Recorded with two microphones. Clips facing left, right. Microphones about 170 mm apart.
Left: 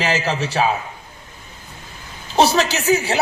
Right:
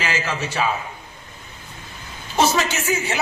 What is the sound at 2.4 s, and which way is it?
Speech, 35° left (ahead or behind).